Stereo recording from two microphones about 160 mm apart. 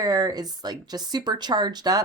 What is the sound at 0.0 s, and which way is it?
A woman's voice, 25° right (ahead or behind).